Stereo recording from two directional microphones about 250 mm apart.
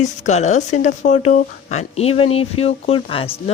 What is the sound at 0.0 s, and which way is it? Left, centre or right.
Speech, left.